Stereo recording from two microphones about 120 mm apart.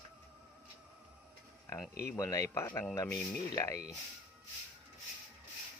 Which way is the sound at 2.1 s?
25° left (ahead or behind).